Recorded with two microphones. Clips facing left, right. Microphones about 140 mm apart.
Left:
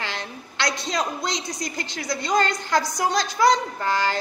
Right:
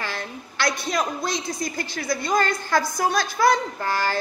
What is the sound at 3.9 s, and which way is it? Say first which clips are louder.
Speech: left 1 dB; 20° left (ahead or behind).